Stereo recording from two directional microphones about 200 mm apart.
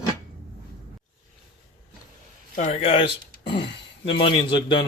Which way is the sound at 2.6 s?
35° left (ahead or behind).